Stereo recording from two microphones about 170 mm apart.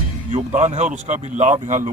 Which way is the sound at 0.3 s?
40° right (ahead or behind).